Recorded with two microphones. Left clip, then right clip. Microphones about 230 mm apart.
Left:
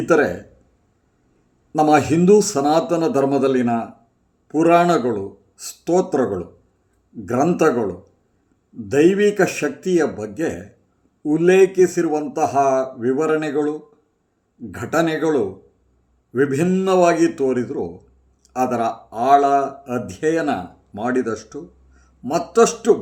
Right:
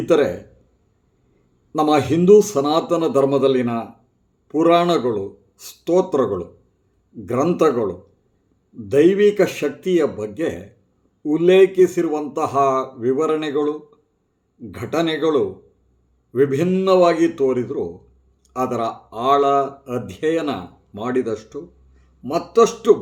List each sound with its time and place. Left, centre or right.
0.2 s speech: left
1.8 s speech: centre
14.8 s speech: centre